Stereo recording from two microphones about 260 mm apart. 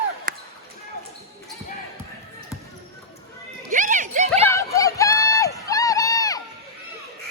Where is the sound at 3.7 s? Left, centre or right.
Right.